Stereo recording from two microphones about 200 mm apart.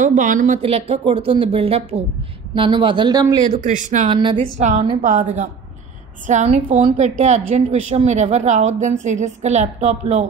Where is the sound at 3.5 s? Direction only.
40° right (ahead or behind).